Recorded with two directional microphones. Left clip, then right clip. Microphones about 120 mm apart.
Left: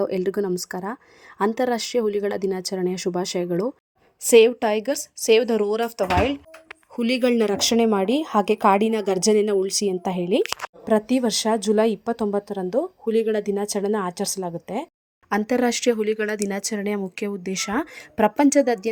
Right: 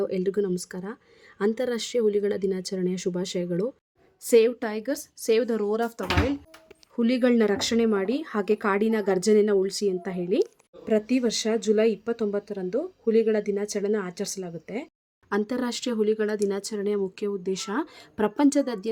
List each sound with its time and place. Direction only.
0.1 s speech: 30° left (ahead or behind)
6.7 s speech: 40° left (ahead or behind)